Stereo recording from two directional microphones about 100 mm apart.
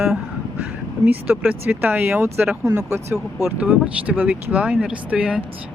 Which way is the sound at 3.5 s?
15° right (ahead or behind).